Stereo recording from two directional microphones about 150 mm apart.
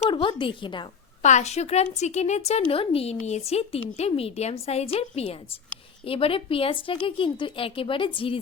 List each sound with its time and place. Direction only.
0.1 s a woman's voice: 35° left (ahead or behind)
1.2 s a woman's voice: 50° left (ahead or behind)
2.6 s a woman's voice: 35° left (ahead or behind)